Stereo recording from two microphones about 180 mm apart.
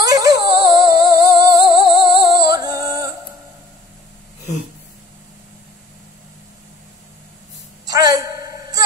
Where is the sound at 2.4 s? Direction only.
20° right (ahead or behind).